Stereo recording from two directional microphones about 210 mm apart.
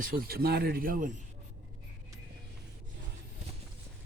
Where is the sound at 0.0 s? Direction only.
45° right (ahead or behind).